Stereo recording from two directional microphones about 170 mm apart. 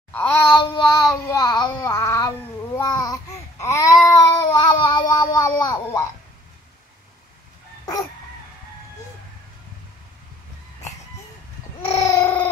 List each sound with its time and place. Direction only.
0.1 s child singing: 10° left (ahead or behind)
0.5 s child singing: 25° left (ahead or behind)
7.8 s dog: 20° left (ahead or behind)
12.1 s a sound: 15° left (ahead or behind)